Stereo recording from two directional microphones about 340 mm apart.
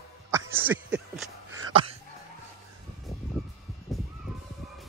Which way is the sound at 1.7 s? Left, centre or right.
Centre.